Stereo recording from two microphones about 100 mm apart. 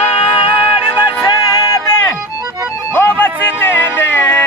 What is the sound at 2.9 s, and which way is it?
Music, 20° left (ahead or behind).